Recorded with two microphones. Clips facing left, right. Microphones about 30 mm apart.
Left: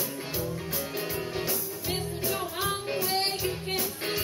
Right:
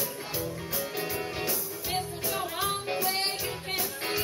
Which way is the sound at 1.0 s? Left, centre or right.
Centre.